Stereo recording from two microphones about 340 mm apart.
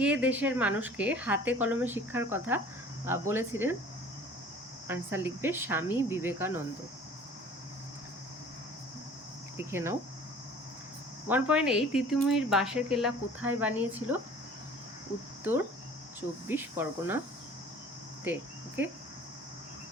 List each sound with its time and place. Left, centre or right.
0.0 s speech: centre
4.9 s speech: centre
9.6 s speech: centre
11.3 s speech: centre
16.5 s speech: centre
18.8 s speech: centre